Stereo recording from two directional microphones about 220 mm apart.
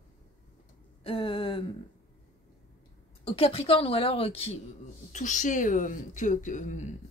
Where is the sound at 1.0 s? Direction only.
25° left (ahead or behind).